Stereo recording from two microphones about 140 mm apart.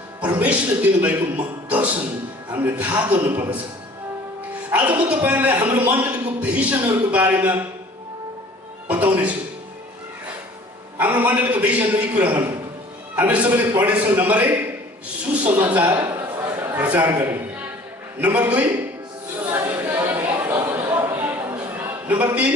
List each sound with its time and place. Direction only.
0.2 s a man's voice: 10° right (ahead or behind)
4.7 s a man's voice: 10° right (ahead or behind)
8.9 s speech: 10° right (ahead or behind)
10.9 s a man's voice: 15° right (ahead or behind)
15.9 s a sound: 20° right (ahead or behind)
18.2 s a man's voice: 10° right (ahead or behind)
19.5 s a sound: 25° right (ahead or behind)
19.7 s chatter: 15° right (ahead or behind)
21.0 s a sound: 15° right (ahead or behind)